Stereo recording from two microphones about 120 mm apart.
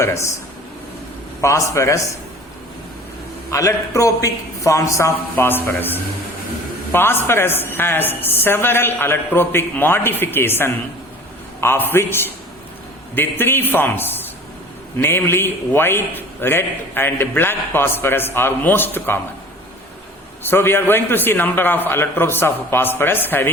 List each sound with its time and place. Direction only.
1.4 s a man's voice: 25° left (ahead or behind)
3.5 s a man's voice: 25° left (ahead or behind)
20.4 s a man's voice: 20° left (ahead or behind)